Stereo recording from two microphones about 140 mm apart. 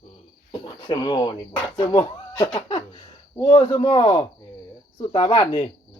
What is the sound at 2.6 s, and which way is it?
Speech, 45° left (ahead or behind).